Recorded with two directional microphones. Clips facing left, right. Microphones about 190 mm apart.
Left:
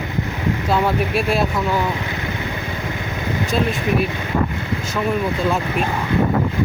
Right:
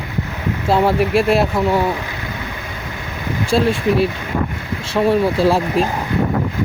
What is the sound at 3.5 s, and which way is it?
Speech, 30° right (ahead or behind).